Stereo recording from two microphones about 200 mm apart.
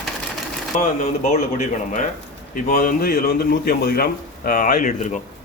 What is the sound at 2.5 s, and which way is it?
A man's voice, 45° left (ahead or behind).